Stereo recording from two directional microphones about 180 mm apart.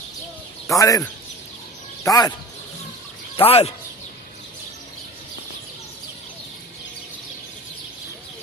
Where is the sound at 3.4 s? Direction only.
35° left (ahead or behind).